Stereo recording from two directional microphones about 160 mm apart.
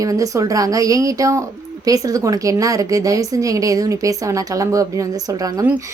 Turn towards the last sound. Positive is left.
turn(degrees=-20)  # may be behind; listen again after turning